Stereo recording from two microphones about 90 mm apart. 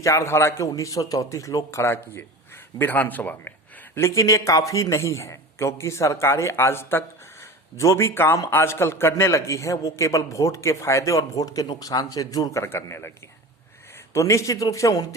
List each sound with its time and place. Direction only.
0.0 s a man's voice: 35° left (ahead or behind)
2.7 s speech: 20° left (ahead or behind)
3.9 s a man's voice: 35° left (ahead or behind)
14.1 s a man's voice: 35° left (ahead or behind)